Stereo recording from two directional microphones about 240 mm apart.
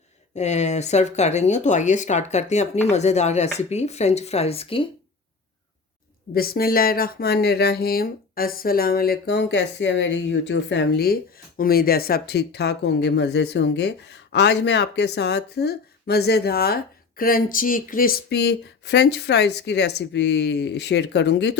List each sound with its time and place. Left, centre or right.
0.3 s speech: left
6.3 s speech: left